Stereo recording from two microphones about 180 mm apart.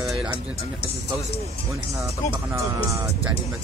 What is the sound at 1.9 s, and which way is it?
Speech, 5° right (ahead or behind).